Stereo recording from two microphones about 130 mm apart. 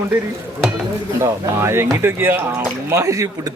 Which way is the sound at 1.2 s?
20° right (ahead or behind).